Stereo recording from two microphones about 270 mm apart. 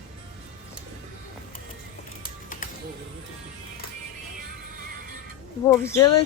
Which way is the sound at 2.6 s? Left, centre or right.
Left.